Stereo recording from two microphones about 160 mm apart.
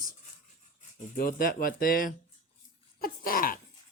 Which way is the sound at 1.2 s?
65° left (ahead or behind).